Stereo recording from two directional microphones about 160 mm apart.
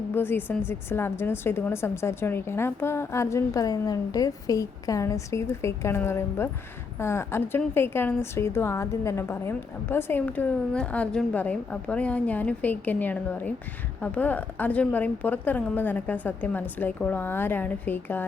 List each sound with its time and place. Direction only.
0.1 s a woman's voice: 15° left (ahead or behind)